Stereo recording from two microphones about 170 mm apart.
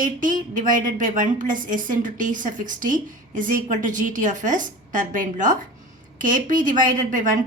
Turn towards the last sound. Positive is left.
turn(degrees=-50)  # may be behind; listen again after turning